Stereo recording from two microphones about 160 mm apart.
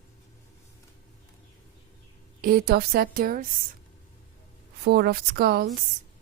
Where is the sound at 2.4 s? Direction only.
70° right (ahead or behind).